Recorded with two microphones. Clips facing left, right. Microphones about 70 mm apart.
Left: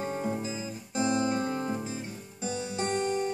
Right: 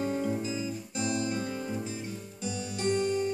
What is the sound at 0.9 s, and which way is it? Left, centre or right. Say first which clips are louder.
Music: left 5 dB; left.